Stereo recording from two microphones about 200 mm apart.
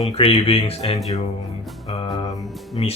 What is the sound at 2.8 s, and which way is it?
Speech, 30° left (ahead or behind).